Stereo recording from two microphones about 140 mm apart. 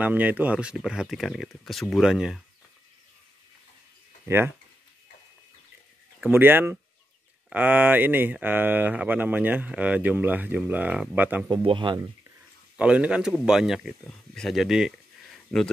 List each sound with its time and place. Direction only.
0.0 s speech: 10° right (ahead or behind)
6.2 s speech: 15° right (ahead or behind)
11.5 s speech: 35° right (ahead or behind)
12.7 s speech: 10° right (ahead or behind)